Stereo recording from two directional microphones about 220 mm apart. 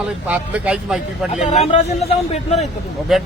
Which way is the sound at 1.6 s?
30° left (ahead or behind).